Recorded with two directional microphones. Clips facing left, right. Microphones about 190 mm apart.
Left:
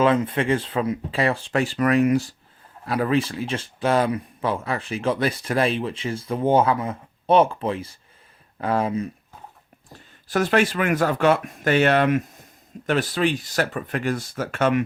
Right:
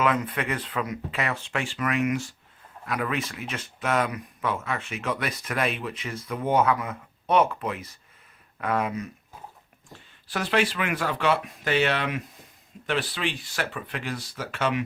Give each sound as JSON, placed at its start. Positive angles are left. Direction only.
{"t": 0.0, "sound": "speech", "side_deg": 30}
{"t": 9.9, "sound": "speech", "side_deg": 45}